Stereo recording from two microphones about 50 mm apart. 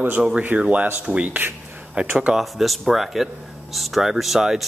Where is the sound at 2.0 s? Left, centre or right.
Right.